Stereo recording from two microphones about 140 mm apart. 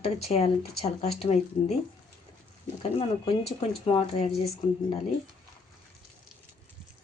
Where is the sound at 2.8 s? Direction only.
45° left (ahead or behind).